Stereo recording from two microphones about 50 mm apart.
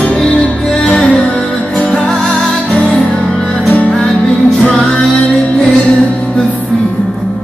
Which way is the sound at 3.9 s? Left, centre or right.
Centre.